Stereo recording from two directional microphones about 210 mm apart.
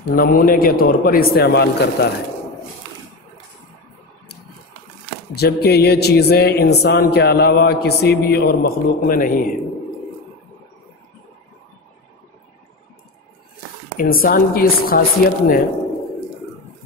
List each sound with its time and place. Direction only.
0.1 s speech: 40° left (ahead or behind)
5.3 s speech: 50° left (ahead or behind)
13.9 s speech: 45° left (ahead or behind)